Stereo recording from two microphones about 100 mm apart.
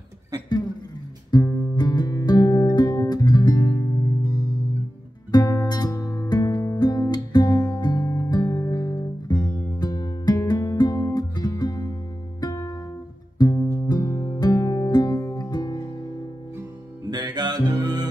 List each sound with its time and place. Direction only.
1.3 s music: 35° left (ahead or behind)
5.3 s music: 35° left (ahead or behind)
5.9 s music: 30° left (ahead or behind)
6.2 s music: 40° left (ahead or behind)
8.5 s music: 25° left (ahead or behind)
8.7 s music: 35° left (ahead or behind)
17.1 s music: 45° right (ahead or behind)